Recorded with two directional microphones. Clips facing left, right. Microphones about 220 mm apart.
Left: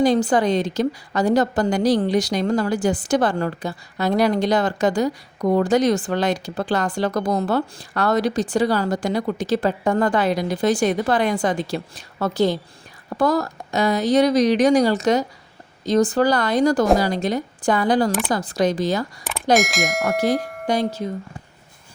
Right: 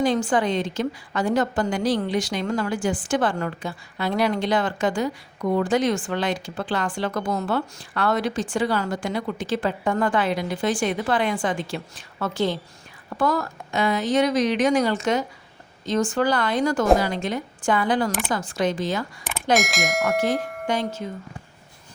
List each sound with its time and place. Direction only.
0.0 s a woman's voice: 40° left (ahead or behind)
19.5 s speech: centre (ahead or behind)
20.7 s a woman's voice: 35° left (ahead or behind)